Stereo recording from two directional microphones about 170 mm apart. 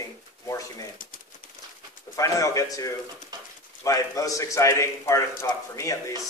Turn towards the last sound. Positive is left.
turn(degrees=20)  # may be behind; listen again after turning